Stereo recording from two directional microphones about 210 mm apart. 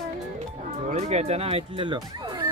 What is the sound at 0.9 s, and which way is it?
Speech, 30° right (ahead or behind).